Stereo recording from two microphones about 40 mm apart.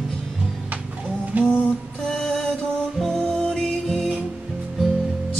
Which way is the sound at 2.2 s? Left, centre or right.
Centre.